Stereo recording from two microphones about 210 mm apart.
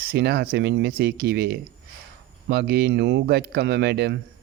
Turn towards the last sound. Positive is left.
turn(degrees=-50)  # may be behind; listen again after turning